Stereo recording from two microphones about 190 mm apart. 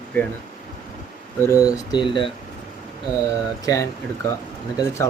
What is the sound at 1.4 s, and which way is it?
Speech, 15° left (ahead or behind).